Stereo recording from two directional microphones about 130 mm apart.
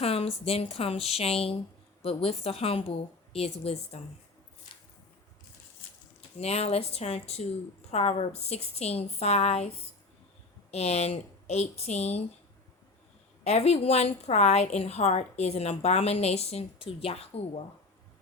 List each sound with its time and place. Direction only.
0.0 s a woman's voice: 50° left (ahead or behind)
6.4 s a woman's voice: 55° left (ahead or behind)
13.4 s a woman's voice: 55° left (ahead or behind)